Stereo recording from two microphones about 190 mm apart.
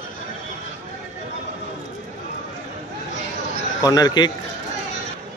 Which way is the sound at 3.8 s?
20° left (ahead or behind).